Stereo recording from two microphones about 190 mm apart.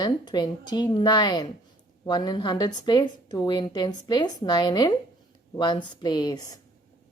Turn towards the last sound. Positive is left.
turn(degrees=20)  # may be behind; listen again after turning